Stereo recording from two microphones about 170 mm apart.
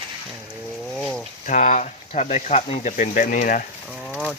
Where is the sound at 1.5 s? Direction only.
45° left (ahead or behind).